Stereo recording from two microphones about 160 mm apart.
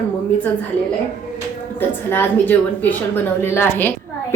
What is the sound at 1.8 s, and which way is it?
A woman's voice, 10° left (ahead or behind).